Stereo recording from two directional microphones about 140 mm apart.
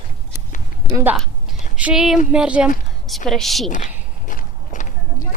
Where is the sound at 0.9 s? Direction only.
15° right (ahead or behind).